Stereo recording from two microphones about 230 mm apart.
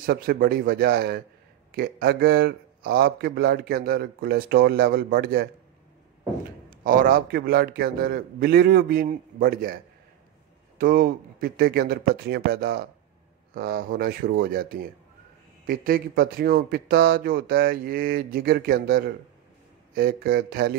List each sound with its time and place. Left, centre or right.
0.0 s a man's voice: right
6.7 s a man's voice: right
10.8 s a man's voice: right